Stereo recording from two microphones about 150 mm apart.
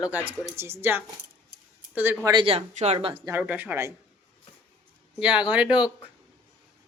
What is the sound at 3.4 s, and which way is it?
Speech, 10° right (ahead or behind).